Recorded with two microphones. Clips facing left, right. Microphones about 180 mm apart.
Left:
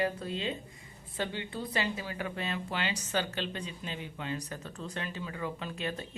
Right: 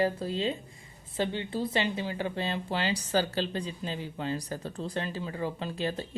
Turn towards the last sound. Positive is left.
turn(degrees=-35)  # may be behind; listen again after turning